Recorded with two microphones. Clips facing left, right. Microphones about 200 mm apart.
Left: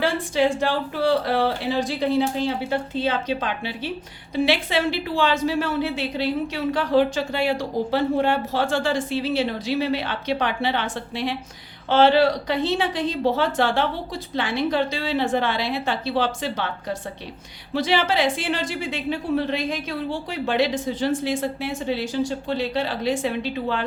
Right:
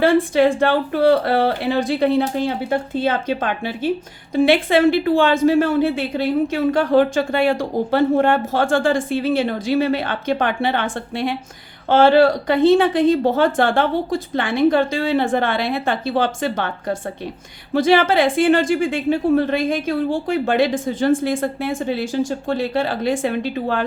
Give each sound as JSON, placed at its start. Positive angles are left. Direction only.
{"t": 0.0, "sound": "a woman's voice", "side_deg": -55}